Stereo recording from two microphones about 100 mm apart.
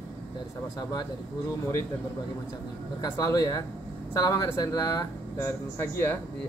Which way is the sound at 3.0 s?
35° left (ahead or behind).